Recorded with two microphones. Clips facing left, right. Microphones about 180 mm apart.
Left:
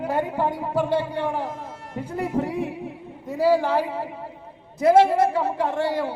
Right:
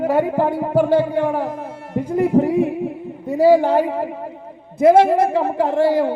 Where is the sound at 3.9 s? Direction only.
50° right (ahead or behind).